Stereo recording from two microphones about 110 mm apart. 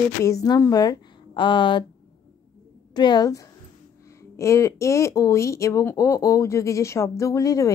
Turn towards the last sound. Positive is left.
turn(degrees=30)  # may be behind; listen again after turning